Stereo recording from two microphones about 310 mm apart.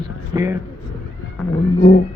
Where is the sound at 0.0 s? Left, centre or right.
Centre.